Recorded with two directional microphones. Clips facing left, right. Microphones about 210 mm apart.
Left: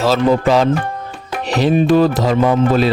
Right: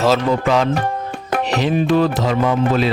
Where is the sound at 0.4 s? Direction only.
35° left (ahead or behind).